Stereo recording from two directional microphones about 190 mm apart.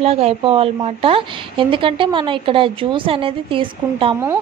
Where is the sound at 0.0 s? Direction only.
30° right (ahead or behind).